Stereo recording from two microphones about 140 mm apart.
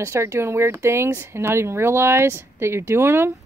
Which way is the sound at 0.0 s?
20° right (ahead or behind).